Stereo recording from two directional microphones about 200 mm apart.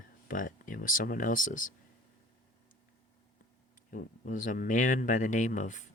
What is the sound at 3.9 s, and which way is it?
Speech, 40° left (ahead or behind).